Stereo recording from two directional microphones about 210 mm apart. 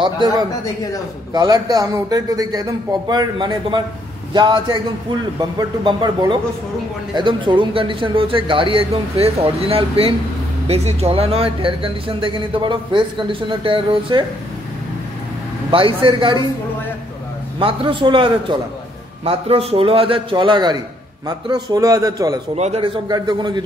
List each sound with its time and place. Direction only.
0.0 s speech: 20° right (ahead or behind)
15.7 s speech: 25° right (ahead or behind)
17.6 s a man's voice: 25° right (ahead or behind)
22.6 s speech: 30° right (ahead or behind)